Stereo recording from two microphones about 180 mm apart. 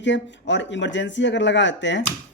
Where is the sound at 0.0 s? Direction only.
85° left.